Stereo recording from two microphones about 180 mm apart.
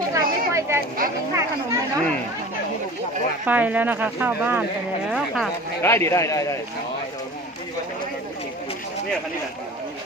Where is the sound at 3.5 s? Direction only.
10° right (ahead or behind).